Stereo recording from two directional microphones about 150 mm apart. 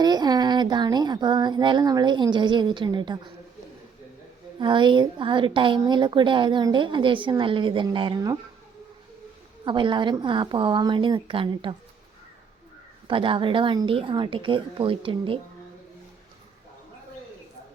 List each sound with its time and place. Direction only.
0.0 s speech: 25° right (ahead or behind)
4.6 s a woman's voice: 30° right (ahead or behind)
9.6 s a woman's voice: 30° right (ahead or behind)
13.1 s a woman's voice: 35° right (ahead or behind)